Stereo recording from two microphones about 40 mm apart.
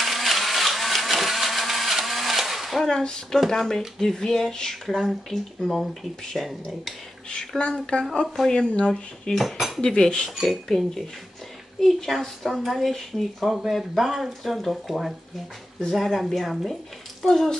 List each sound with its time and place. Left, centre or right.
0.0 s vehicle: centre
2.9 s speech: left
3.4 s speech: centre
4.8 s speech: centre
7.2 s speech: left
8.9 s speech: centre
9.4 s cutlery: centre
9.8 s speech: centre
10.4 s speech: centre
11.8 s speech: centre
17.2 s speech: centre